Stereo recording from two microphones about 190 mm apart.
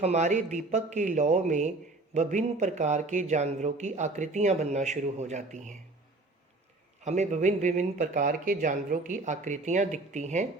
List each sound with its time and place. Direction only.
0.0 s speech: 35° right (ahead or behind)
7.0 s speech: 35° right (ahead or behind)